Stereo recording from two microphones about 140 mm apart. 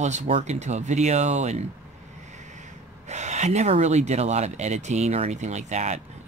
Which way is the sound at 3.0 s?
55° right (ahead or behind).